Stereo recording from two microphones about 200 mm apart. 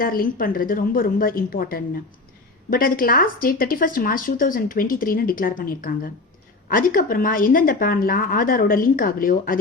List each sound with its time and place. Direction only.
0.0 s speech: 45° left (ahead or behind)